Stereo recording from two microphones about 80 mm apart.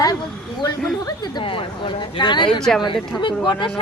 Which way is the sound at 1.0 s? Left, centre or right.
Left.